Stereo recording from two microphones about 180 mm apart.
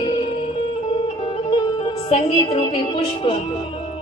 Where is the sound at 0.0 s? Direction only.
25° left (ahead or behind).